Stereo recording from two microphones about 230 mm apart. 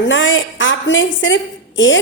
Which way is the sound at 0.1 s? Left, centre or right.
Left.